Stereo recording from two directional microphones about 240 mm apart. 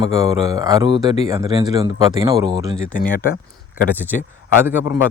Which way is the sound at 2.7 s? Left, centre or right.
Left.